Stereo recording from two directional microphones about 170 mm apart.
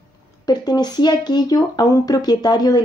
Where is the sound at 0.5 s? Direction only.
25° left (ahead or behind).